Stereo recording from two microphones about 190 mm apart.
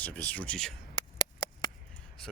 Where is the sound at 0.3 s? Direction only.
5° left (ahead or behind).